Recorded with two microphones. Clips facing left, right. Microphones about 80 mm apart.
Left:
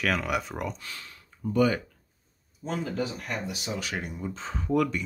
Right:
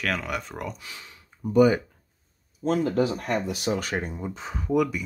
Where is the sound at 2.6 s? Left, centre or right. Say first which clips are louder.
Right 8 dB; right.